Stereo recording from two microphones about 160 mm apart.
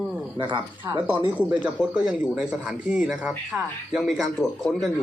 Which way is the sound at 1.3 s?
10° right (ahead or behind).